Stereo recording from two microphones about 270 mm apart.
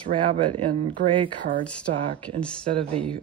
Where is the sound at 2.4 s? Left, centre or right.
Centre.